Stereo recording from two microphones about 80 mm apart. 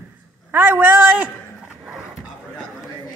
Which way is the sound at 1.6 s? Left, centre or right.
Centre.